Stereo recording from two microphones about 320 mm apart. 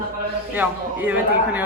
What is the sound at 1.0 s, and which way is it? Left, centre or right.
Speech, centre.